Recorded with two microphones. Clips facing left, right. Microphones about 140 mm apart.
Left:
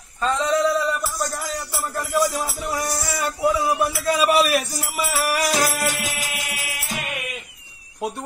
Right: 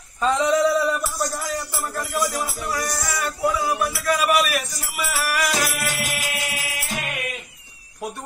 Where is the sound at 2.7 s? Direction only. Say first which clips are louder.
Left 1 dB; 25° left (ahead or behind).